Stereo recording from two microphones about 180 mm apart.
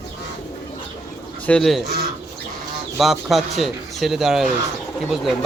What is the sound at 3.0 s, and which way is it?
A man's voice, centre (ahead or behind).